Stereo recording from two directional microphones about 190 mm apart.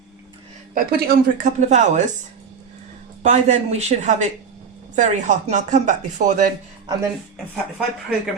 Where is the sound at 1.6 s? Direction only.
35° right (ahead or behind).